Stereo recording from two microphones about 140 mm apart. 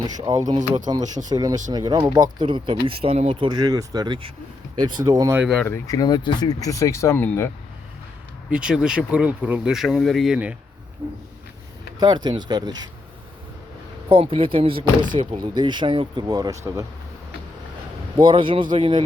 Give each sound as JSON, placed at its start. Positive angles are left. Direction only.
{"t": 0.0, "sound": "speech", "side_deg": -30}
{"t": 5.6, "sound": "speech", "side_deg": 20}
{"t": 8.4, "sound": "speech", "side_deg": -5}
{"t": 11.0, "sound": "speech", "side_deg": -35}
{"t": 14.1, "sound": "speech", "side_deg": -40}
{"t": 18.2, "sound": "speech", "side_deg": -35}